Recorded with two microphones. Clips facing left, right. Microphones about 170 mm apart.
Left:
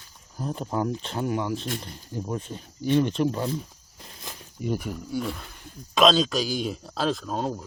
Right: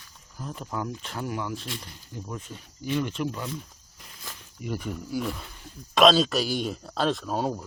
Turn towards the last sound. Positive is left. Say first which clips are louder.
# right 1 dB
turn(degrees=-5)  # may be behind; listen again after turning